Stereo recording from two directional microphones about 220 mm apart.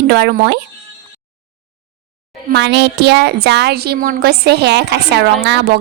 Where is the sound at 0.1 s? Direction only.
50° right (ahead or behind).